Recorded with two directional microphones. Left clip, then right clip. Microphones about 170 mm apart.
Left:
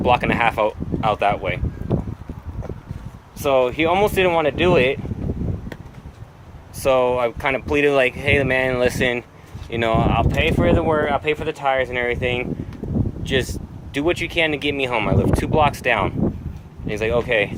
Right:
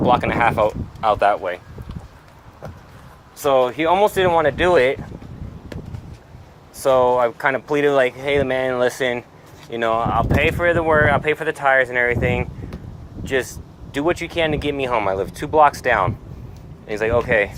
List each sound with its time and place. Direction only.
0.0 s speech: 10° left (ahead or behind)
3.4 s speech: 15° left (ahead or behind)
6.8 s speech: 10° left (ahead or behind)